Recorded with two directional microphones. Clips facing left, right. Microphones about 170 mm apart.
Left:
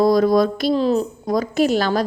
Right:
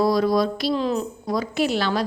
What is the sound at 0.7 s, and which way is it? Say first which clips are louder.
A woman's voice: left 5 dB; 35° left (ahead or behind).